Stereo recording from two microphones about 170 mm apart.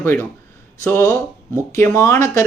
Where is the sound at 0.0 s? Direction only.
15° left (ahead or behind).